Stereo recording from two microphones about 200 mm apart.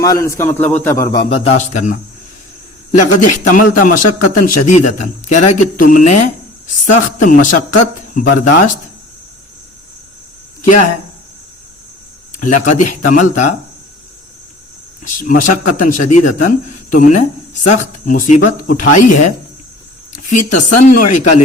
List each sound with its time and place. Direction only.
0.0 s a man's voice: 15° left (ahead or behind); by 6.1 s 40° left (ahead or behind)
7.2 s speech: 40° left (ahead or behind)
12.4 s speech: 40° left (ahead or behind)
15.0 s speech: 40° left (ahead or behind)